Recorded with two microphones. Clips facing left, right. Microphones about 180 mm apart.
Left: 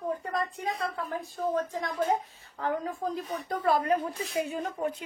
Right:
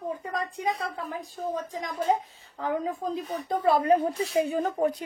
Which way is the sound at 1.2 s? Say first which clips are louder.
Left 4 dB; 15° right (ahead or behind).